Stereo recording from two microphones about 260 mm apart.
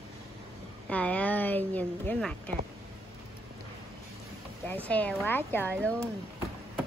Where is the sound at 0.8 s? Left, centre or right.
Centre.